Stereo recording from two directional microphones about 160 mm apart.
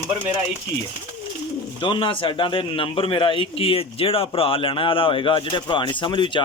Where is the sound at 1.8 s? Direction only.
30° left (ahead or behind).